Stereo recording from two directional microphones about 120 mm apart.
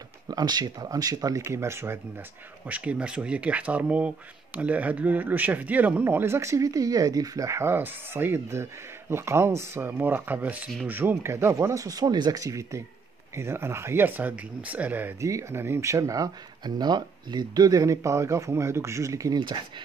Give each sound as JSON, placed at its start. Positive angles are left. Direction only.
{"t": 0.3, "sound": "speech", "side_deg": -35}
{"t": 2.7, "sound": "speech", "side_deg": -10}